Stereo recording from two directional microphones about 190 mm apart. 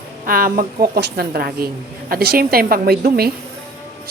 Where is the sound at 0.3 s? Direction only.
50° right (ahead or behind).